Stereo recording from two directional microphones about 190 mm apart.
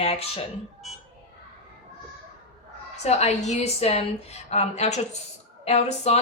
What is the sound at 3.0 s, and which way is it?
Speech, 35° left (ahead or behind).